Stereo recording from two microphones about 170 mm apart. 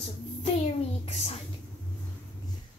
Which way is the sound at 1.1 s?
35° left (ahead or behind).